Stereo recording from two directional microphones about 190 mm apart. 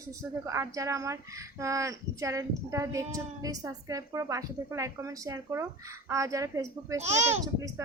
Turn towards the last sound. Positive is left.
turn(degrees=-35)  # may be behind; listen again after turning